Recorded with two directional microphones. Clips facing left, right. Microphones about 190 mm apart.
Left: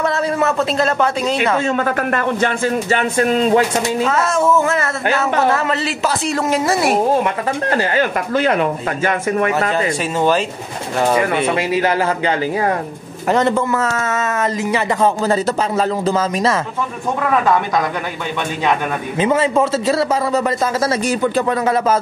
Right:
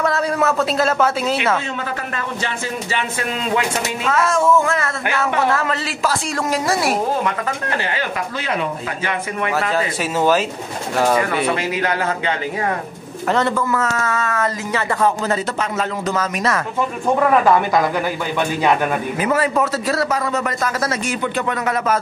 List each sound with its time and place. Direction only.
0.0 s a woman's voice: centre (ahead or behind)
2.1 s speech: 50° left (ahead or behind)
4.3 s a woman's voice: 5° left (ahead or behind)
7.7 s speech: 45° left (ahead or behind)
13.3 s a man's voice: 20° left (ahead or behind)
15.8 s a man's voice: 30° left (ahead or behind)
17.2 s a woman's voice: 5° right (ahead or behind)
19.1 s a man's voice: 25° left (ahead or behind)